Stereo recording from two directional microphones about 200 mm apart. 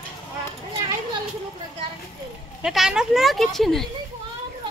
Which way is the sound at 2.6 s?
Centre (ahead or behind).